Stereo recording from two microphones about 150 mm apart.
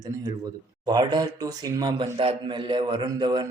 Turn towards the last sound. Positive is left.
turn(degrees=-25)  # may be behind; listen again after turning